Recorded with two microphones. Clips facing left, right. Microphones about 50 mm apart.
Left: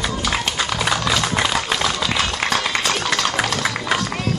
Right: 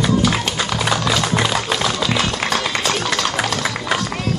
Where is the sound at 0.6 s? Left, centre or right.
Left.